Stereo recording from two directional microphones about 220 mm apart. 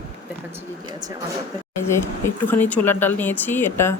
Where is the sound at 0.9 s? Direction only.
20° right (ahead or behind).